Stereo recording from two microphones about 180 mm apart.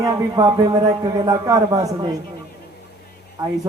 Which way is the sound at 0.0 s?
20° right (ahead or behind).